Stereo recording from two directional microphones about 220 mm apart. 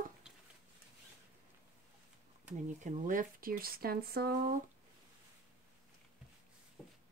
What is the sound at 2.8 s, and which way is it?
Speech, 35° right (ahead or behind).